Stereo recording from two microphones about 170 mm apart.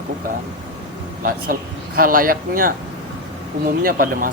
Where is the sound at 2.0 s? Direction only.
55° right (ahead or behind).